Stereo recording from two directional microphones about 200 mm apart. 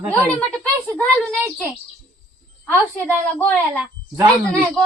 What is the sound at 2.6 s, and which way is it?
A woman's voice, 10° left (ahead or behind).